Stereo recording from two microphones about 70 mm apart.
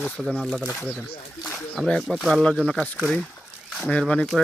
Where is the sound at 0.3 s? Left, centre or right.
Centre.